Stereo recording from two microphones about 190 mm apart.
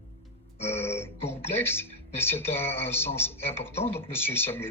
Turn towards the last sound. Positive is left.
turn(degrees=10)  # may be behind; listen again after turning